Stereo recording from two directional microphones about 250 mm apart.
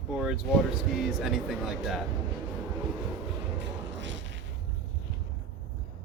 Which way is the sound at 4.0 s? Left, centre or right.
Right.